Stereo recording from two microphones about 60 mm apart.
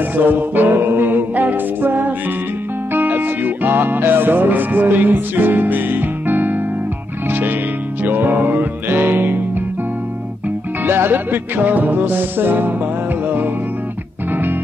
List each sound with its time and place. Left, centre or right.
0.1 s music: right
10.8 s music: right
14.3 s music: right